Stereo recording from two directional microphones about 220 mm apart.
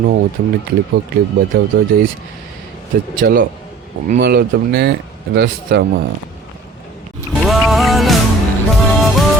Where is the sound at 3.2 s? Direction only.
40° right (ahead or behind).